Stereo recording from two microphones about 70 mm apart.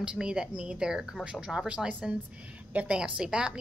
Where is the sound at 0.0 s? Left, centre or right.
Centre.